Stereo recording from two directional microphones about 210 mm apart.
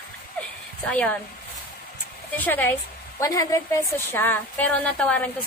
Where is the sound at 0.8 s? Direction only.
5° left (ahead or behind).